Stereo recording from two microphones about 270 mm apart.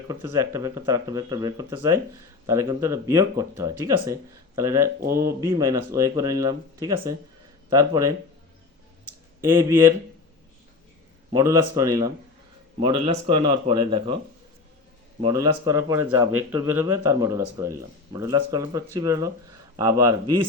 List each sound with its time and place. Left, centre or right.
0.1 s speech: centre
9.4 s speech: centre
11.3 s speech: centre
15.2 s speech: centre